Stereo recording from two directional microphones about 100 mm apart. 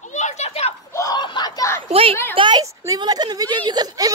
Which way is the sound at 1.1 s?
45° left (ahead or behind).